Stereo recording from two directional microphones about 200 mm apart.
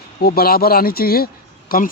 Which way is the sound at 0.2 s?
50° left (ahead or behind).